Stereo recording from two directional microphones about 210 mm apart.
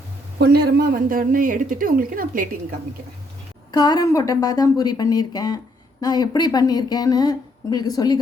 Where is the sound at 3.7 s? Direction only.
20° left (ahead or behind).